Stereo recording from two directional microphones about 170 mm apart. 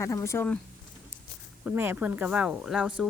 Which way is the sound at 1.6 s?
10° right (ahead or behind).